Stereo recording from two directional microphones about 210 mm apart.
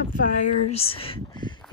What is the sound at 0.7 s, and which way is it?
Speech, 25° left (ahead or behind).